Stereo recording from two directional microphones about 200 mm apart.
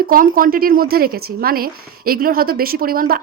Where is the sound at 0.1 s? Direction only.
45° right (ahead or behind).